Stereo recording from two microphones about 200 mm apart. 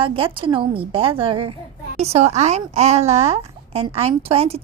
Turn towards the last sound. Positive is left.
turn(degrees=-30)  # may be behind; listen again after turning